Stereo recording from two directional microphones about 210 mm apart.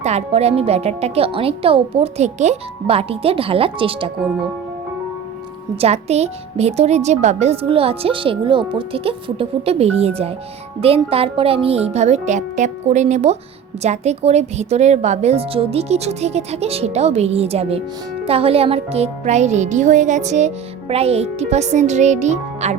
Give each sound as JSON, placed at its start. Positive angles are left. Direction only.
{"t": 0.0, "sound": "speech", "side_deg": -30}
{"t": 5.8, "sound": "speech", "side_deg": -30}